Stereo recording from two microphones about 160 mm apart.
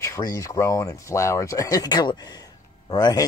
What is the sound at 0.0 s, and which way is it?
Speech, 20° left (ahead or behind).